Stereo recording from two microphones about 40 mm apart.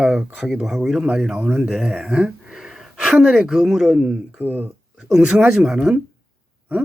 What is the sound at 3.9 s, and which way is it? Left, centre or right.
Speech, right.